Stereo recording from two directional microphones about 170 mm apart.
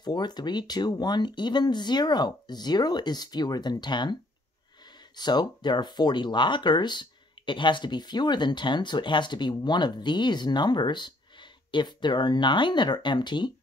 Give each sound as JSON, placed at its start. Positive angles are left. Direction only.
{"t": 0.0, "sound": "speech", "side_deg": 25}